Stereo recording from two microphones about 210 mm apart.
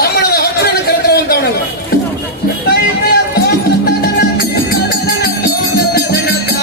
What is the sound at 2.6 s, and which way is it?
Music, 50° left (ahead or behind).